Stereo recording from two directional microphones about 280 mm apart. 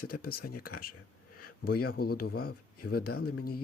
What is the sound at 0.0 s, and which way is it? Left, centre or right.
Speech, left.